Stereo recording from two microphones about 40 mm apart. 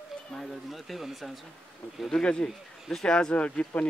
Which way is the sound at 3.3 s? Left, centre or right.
Left.